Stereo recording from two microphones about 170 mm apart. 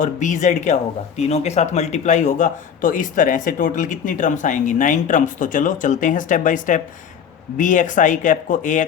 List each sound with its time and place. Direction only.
0.0 s speech: 45° left (ahead or behind)